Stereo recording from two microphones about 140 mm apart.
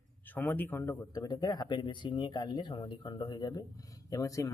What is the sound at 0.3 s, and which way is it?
Speech, 15° left (ahead or behind).